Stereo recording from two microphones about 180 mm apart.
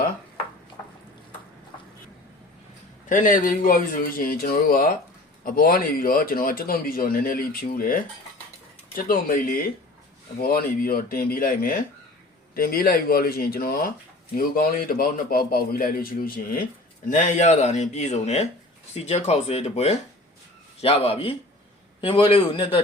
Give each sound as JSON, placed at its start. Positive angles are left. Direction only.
{"t": 3.1, "sound": "speech", "side_deg": 45}
{"t": 9.0, "sound": "a man's voice", "side_deg": 50}